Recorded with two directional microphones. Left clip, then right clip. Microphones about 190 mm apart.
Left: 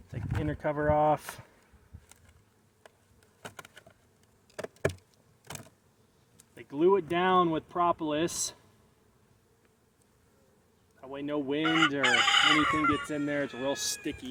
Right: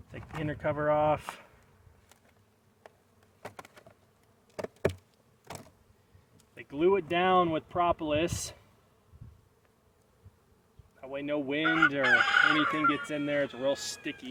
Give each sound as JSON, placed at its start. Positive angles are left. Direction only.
{"t": 0.1, "sound": "speech", "side_deg": 10}
{"t": 3.4, "sound": "bee", "side_deg": 15}
{"t": 6.5, "sound": "speech", "side_deg": 5}
{"t": 11.0, "sound": "speech", "side_deg": 5}
{"t": 11.6, "sound": "chicken", "side_deg": 50}
{"t": 13.1, "sound": "speech", "side_deg": 0}